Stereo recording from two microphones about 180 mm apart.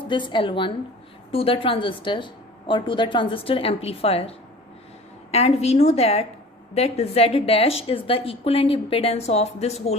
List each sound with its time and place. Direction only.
0.1 s a woman's voice: 25° left (ahead or behind)